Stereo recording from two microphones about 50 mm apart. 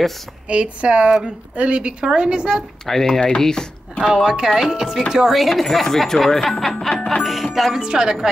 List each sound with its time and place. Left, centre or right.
0.5 s a woman's voice: right
2.9 s speech: centre
4.1 s speech: centre
7.0 s music: centre
7.5 s speech: centre